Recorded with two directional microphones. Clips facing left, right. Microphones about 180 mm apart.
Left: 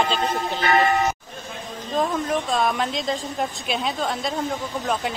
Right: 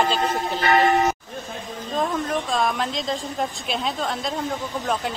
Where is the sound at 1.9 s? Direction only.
Centre (ahead or behind).